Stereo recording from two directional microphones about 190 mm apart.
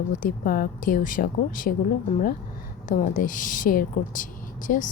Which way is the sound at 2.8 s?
45° left (ahead or behind).